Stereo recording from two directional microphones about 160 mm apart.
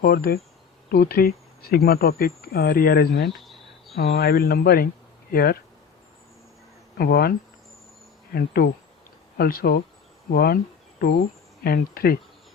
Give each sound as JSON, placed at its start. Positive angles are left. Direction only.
{"t": 0.0, "sound": "speech", "side_deg": 75}
{"t": 7.0, "sound": "speech", "side_deg": 75}
{"t": 11.6, "sound": "speech", "side_deg": 75}